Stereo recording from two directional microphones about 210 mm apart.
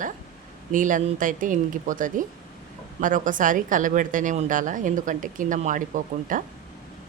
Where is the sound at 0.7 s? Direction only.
40° right (ahead or behind).